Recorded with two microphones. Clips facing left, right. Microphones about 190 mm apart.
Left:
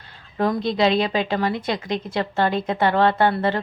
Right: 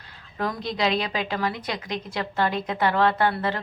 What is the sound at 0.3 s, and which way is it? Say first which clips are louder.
A woman's voice: left 7 dB; 25° left (ahead or behind).